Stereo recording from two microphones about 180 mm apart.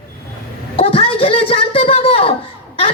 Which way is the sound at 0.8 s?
30° left (ahead or behind).